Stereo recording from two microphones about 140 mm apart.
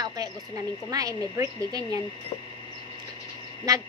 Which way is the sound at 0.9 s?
25° right (ahead or behind).